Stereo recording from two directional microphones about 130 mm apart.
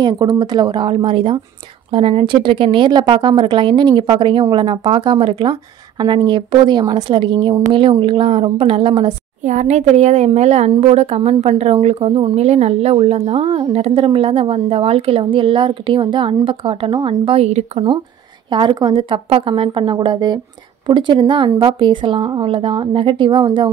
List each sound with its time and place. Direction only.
0.0 s a woman's voice: 30° right (ahead or behind)
9.4 s a woman's voice: 65° right (ahead or behind)
18.5 s a woman's voice: 35° right (ahead or behind)